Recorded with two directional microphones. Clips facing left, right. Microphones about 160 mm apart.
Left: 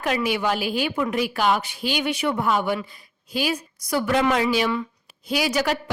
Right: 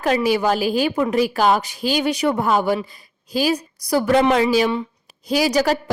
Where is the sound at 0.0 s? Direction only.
40° right (ahead or behind).